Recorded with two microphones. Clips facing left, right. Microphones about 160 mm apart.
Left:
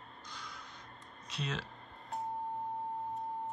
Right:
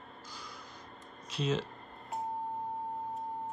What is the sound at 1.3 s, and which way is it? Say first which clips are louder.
Speech: right 7 dB; centre (ahead or behind).